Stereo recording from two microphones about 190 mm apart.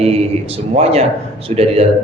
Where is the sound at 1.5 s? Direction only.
35° right (ahead or behind).